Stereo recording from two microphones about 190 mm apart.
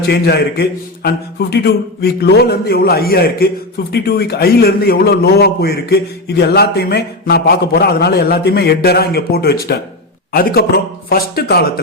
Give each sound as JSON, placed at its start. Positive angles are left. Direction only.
{"t": 0.0, "sound": "a man's voice", "side_deg": 60}
{"t": 11.1, "sound": "a man's voice", "side_deg": 55}